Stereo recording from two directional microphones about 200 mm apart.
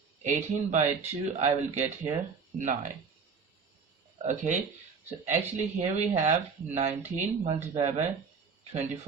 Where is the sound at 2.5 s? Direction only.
40° right (ahead or behind).